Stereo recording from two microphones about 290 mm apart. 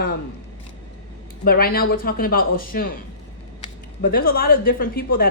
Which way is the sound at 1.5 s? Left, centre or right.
Left.